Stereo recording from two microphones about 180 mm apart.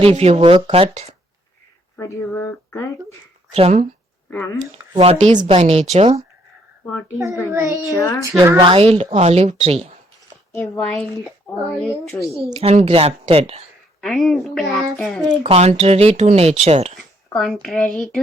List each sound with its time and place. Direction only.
0.0 s speech: 35° right (ahead or behind)
2.0 s speech: 15° left (ahead or behind)
3.5 s speech: 35° right (ahead or behind)
4.3 s speech: 10° left (ahead or behind)
4.9 s speech: 35° right (ahead or behind)
7.5 s a child's voice: 15° right (ahead or behind)
7.9 s a child's voice: 20° left (ahead or behind)
8.3 s speech: 20° right (ahead or behind)
8.8 s speech: 35° right (ahead or behind)
10.5 s speech: 10° left (ahead or behind)
12.5 s speech: 35° right (ahead or behind)
14.0 s speech: centre (ahead or behind)
15.3 s speech: 35° right (ahead or behind)
17.3 s speech: centre (ahead or behind)